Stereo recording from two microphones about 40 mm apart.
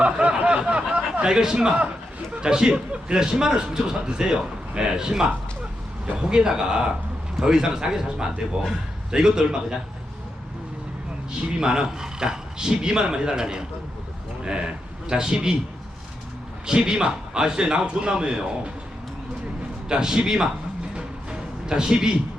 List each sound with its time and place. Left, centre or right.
0.0 s a sound: right
1.3 s a man's voice: centre
11.6 s a man's voice: centre
15.1 s a man's voice: right
16.6 s a man's voice: centre
19.9 s a man's voice: centre
20.9 s music: right